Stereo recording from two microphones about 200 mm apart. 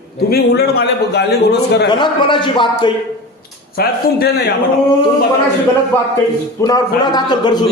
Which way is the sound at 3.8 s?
50° left (ahead or behind).